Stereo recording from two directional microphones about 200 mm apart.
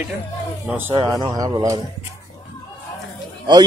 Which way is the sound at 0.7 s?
10° right (ahead or behind).